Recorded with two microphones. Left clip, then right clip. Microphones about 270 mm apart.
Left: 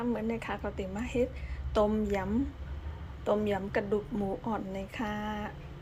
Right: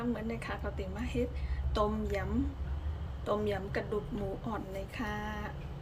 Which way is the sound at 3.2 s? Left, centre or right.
Centre.